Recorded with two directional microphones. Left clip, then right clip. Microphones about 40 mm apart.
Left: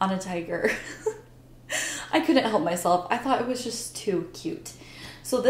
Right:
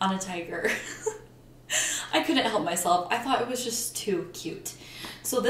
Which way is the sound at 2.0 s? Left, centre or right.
Left.